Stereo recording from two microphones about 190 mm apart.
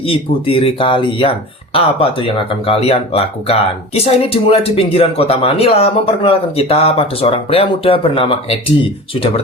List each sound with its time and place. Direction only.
0.1 s speech: 30° left (ahead or behind)